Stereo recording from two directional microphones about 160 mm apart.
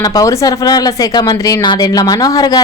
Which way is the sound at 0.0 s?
20° left (ahead or behind).